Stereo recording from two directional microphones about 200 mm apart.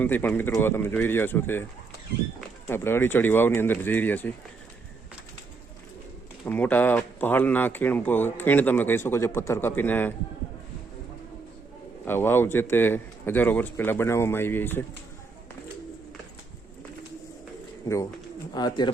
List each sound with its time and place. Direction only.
0.0 s speech: 10° left (ahead or behind)
2.6 s speech: 10° left (ahead or behind)
6.4 s speech: 10° left (ahead or behind)
12.0 s speech: 10° left (ahead or behind)
17.8 s speech: 15° left (ahead or behind)